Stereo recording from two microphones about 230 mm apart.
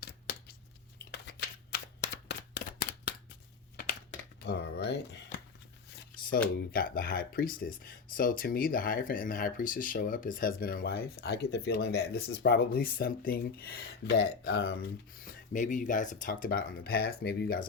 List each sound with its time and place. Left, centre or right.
0.0 s a sound: left
0.9 s shuffling cards: left
2.2 s a sound: left
4.4 s speech: left
6.7 s speech: left
15.2 s speech: left